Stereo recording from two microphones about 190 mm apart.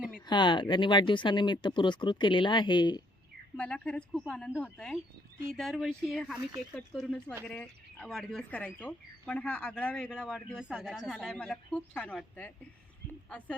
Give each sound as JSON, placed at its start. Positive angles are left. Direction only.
{"t": 0.3, "sound": "speech", "side_deg": 25}
{"t": 3.6, "sound": "speech", "side_deg": 5}